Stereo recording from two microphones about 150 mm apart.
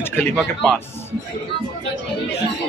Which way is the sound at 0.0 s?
15° left (ahead or behind).